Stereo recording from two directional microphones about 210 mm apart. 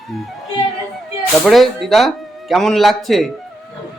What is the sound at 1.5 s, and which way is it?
Speech, centre (ahead or behind).